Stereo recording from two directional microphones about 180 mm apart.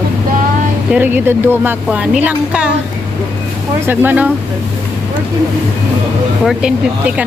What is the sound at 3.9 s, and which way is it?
Speech, 10° right (ahead or behind).